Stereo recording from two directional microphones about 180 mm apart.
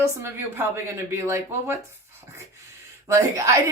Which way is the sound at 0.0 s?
15° right (ahead or behind).